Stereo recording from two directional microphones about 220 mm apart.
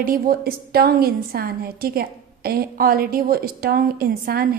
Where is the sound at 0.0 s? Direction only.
40° right (ahead or behind).